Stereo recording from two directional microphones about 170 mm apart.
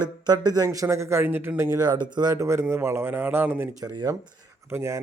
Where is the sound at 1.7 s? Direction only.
25° right (ahead or behind).